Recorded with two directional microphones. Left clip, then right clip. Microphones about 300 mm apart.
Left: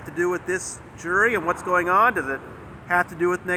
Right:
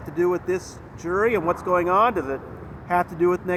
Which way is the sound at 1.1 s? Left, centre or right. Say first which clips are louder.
Left 1 dB; centre.